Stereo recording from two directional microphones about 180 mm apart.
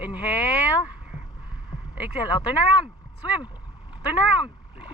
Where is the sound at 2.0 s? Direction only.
5° right (ahead or behind).